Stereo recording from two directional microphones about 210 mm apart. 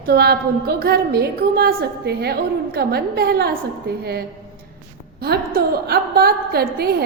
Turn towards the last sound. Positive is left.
turn(degrees=-50)  # may be behind; listen again after turning